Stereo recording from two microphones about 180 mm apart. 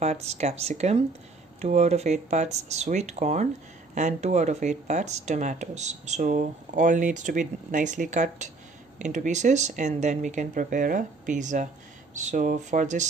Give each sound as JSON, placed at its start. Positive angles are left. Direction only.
{"t": 0.0, "sound": "speech", "side_deg": -35}